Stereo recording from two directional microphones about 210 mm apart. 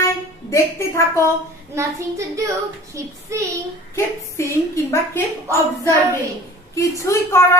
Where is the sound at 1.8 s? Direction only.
15° right (ahead or behind).